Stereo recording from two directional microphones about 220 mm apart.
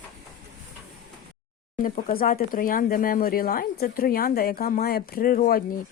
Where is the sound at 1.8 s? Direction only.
40° left (ahead or behind).